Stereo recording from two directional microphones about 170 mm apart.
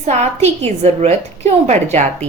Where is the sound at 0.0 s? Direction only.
40° right (ahead or behind).